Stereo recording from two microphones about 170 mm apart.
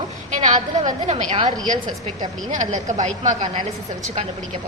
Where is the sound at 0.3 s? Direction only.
45° right (ahead or behind).